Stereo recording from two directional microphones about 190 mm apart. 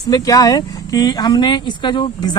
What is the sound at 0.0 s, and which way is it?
Speech, 20° left (ahead or behind).